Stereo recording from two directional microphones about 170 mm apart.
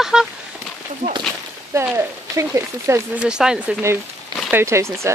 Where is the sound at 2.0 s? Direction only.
15° right (ahead or behind).